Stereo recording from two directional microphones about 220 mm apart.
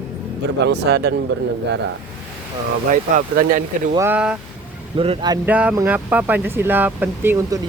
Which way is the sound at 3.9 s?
10° right (ahead or behind).